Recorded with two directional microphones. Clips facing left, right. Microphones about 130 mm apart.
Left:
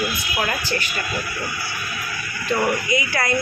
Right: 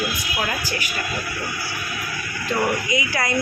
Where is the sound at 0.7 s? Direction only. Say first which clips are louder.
Left 3 dB; 10° right (ahead or behind).